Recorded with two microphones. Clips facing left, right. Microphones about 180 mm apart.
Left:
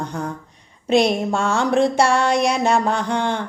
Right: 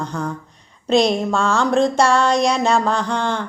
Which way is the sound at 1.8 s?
55° left (ahead or behind).